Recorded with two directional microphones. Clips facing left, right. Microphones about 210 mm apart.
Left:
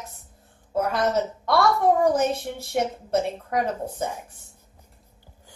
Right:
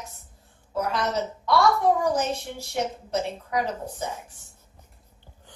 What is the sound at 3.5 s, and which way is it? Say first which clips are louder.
Speech: left 1 dB; 55° left (ahead or behind).